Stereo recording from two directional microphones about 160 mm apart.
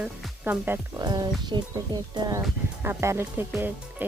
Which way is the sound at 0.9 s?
25° right (ahead or behind).